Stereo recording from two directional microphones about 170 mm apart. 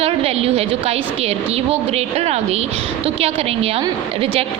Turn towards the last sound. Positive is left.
turn(degrees=-35)  # may be behind; listen again after turning